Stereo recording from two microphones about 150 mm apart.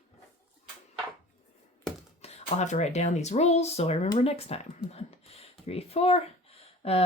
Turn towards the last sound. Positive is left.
turn(degrees=40)  # may be behind; listen again after turning